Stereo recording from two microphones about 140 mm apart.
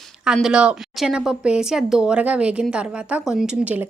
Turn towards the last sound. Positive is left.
turn(degrees=-10)  # may be behind; listen again after turning